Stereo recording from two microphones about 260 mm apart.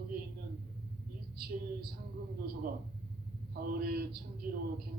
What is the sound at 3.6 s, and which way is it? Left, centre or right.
Speech, right.